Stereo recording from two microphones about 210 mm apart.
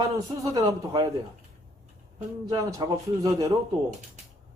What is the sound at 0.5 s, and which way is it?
Speech, 15° right (ahead or behind).